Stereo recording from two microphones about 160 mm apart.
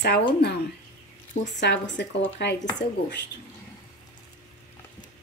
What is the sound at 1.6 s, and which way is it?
Speech, 90° left.